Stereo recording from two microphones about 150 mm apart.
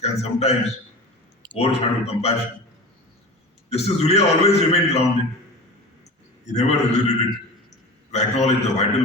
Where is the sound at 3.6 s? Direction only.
45° left (ahead or behind).